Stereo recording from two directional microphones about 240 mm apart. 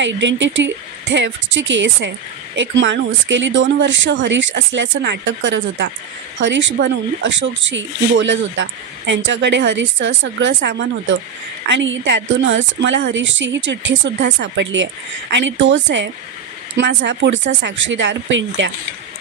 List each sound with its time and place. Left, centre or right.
0.0 s speech: right